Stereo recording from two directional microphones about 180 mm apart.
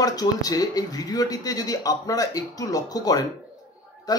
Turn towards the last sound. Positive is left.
turn(degrees=20)  # may be behind; listen again after turning